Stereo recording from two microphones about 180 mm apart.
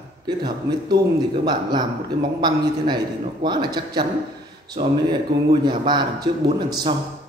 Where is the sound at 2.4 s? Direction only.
25° right (ahead or behind).